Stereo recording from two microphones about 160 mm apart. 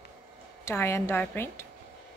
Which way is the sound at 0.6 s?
15° left (ahead or behind).